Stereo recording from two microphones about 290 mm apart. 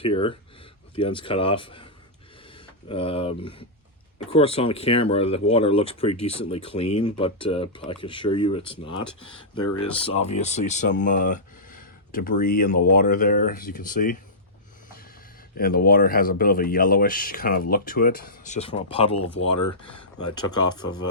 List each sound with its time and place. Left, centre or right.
0.0 s speech: centre
15.5 s speech: left
20.3 s speech: centre